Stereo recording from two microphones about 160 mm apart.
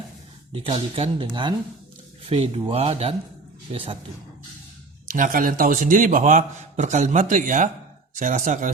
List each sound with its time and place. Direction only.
0.5 s speech: 35° right (ahead or behind)
5.1 s a man's voice: 55° right (ahead or behind)